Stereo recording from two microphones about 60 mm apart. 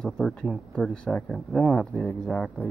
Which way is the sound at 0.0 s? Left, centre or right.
Centre.